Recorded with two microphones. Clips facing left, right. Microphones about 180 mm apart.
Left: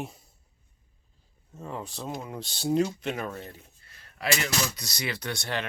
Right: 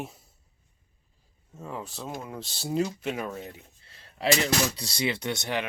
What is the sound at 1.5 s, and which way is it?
Speech, 5° right (ahead or behind).